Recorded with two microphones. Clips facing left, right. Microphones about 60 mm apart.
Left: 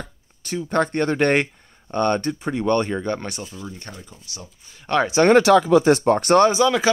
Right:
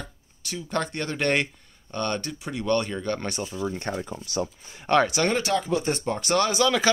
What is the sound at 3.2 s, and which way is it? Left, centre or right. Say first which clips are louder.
Speech: right 3 dB; centre.